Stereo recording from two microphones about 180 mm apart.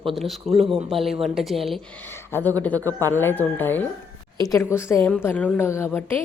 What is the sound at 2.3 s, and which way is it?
A woman's voice, 10° left (ahead or behind).